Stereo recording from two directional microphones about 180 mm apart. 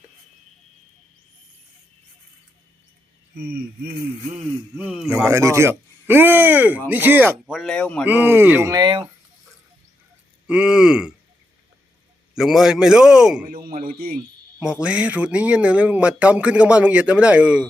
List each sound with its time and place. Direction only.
3.3 s speech: 60° right (ahead or behind)
4.8 s a man's voice: 5° right (ahead or behind)
5.2 s speech: 15° right (ahead or behind); by 8.0 s 5° left (ahead or behind)
8.0 s speech: 10° right (ahead or behind); by 9.0 s 25° right (ahead or behind)
10.4 s a man's voice: 5° right (ahead or behind)
12.3 s a man's voice: centre (ahead or behind)
13.5 s speech: 55° right (ahead or behind)
14.6 s speech: 5° right (ahead or behind)